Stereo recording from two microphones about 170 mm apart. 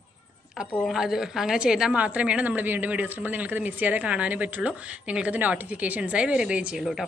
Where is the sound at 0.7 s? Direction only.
Centre (ahead or behind).